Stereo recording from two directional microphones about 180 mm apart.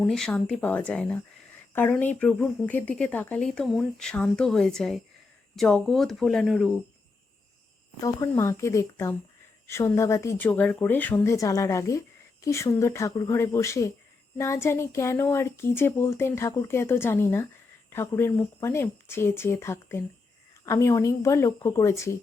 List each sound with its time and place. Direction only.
0.0 s speech: centre (ahead or behind)
8.0 s speech: 15° left (ahead or behind)